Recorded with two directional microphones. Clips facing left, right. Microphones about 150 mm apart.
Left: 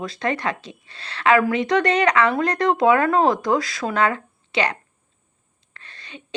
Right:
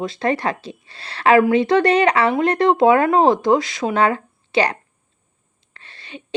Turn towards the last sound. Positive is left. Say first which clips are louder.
# right 4 dB
turn(degrees=-30)  # may be behind; listen again after turning